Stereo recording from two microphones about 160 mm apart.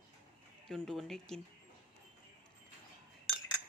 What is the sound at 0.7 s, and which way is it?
Speech, centre (ahead or behind).